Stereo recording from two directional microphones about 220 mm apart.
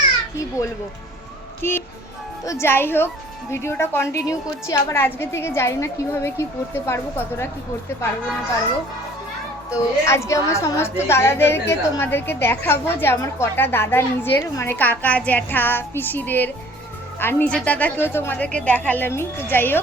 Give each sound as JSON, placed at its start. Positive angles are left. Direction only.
{"t": 1.6, "sound": "a woman's voice", "side_deg": 10}
{"t": 9.6, "sound": "a woman's voice", "side_deg": 15}